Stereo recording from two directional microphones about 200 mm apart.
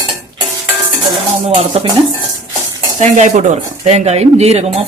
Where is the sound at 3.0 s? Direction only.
40° right (ahead or behind).